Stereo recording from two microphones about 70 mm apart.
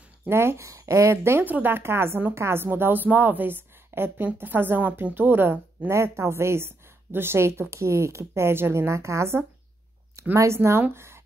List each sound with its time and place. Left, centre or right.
0.3 s a woman's voice: right
0.7 s speech: right
1.1 s a woman's voice: right
1.4 s a woman's voice: right